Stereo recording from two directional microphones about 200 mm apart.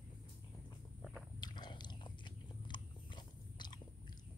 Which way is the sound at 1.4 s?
20° left (ahead or behind).